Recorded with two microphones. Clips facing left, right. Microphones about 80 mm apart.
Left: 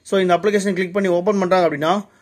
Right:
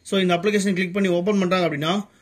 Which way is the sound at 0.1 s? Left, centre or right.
Left.